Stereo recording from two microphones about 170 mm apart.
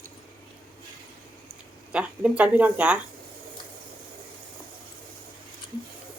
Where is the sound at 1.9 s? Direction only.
5° right (ahead or behind).